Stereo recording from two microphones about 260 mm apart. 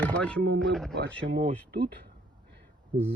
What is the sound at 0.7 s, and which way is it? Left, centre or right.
Speech, centre.